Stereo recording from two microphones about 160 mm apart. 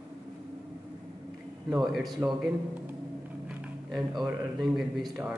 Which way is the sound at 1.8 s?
Centre (ahead or behind).